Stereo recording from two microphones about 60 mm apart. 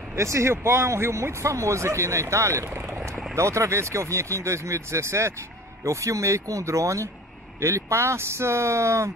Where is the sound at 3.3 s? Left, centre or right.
Right.